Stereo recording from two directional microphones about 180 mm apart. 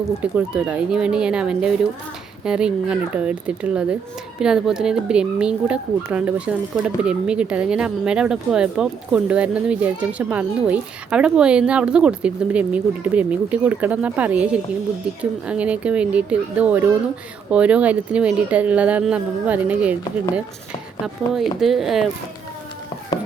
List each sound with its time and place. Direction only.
0.2 s speech: 5° right (ahead or behind)
21.0 s speech: 5° right (ahead or behind)